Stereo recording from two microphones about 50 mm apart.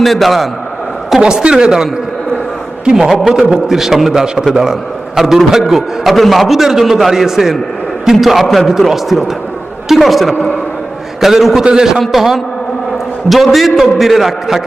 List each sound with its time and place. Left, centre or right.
0.0 s a man's voice: centre
1.2 s a man's voice: centre
2.9 s a man's voice: centre